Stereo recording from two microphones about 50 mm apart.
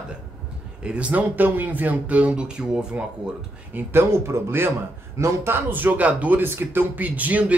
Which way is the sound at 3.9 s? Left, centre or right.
Right.